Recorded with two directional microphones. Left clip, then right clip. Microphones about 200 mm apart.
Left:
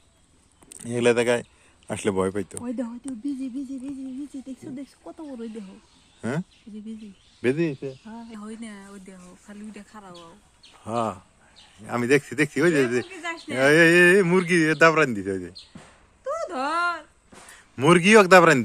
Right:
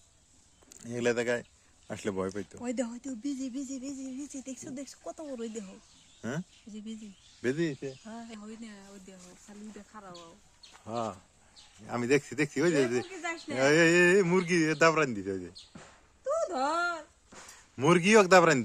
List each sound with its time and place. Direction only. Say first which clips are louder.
0.7 s speech: left 9 dB; 25° left (ahead or behind)
2.6 s speech: left 2 dB; 15° right (ahead or behind)
6.7 s speech: left 5 dB; 35° right (ahead or behind)
7.4 s speech: left 7 dB; 10° left (ahead or behind)
8.0 s speech: left 3 dB; 15° right (ahead or behind)
8.4 s speech: left 8 dB; 40° left (ahead or behind)
10.8 s speech: left 8 dB; 15° left (ahead or behind)
13.2 s speech: left 5 dB; 25° left (ahead or behind)
13.6 s speech: left 7 dB; 5° left (ahead or behind)
16.2 s a sound: left 2 dB; 30° left (ahead or behind)
17.7 s speech: left 7 dB; 5° left (ahead or behind)